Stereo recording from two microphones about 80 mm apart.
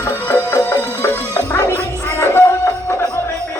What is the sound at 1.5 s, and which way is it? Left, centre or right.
Music, left.